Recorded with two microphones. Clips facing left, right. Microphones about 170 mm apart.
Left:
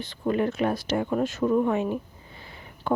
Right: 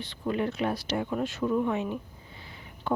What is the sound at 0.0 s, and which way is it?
Speech, 45° left (ahead or behind).